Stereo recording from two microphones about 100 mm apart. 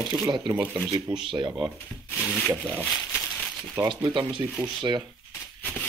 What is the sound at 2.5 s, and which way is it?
Speech, 20° right (ahead or behind).